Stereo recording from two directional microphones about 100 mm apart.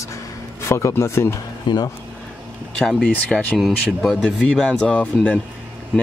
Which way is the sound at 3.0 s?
15° left (ahead or behind).